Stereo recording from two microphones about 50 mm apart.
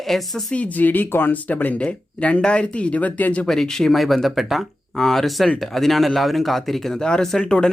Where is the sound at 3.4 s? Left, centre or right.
Centre.